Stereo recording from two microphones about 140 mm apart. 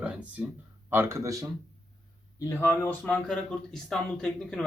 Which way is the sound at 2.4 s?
15° left (ahead or behind).